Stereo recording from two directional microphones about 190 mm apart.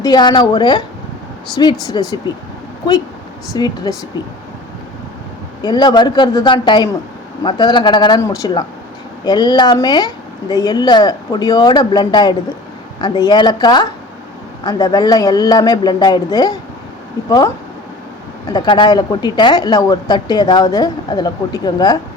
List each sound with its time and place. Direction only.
0.0 s speech: 20° left (ahead or behind)
3.5 s speech: 20° left (ahead or behind)
5.6 s speech: 20° left (ahead or behind)